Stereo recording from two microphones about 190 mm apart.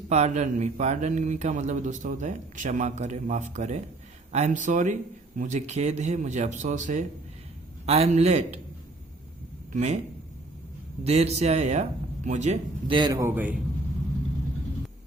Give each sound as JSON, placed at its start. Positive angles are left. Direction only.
{"t": 0.1, "sound": "a man's voice", "side_deg": -35}
{"t": 9.7, "sound": "a man's voice", "side_deg": -40}
{"t": 11.0, "sound": "a man's voice", "side_deg": -35}
{"t": 12.9, "sound": "a man's voice", "side_deg": -20}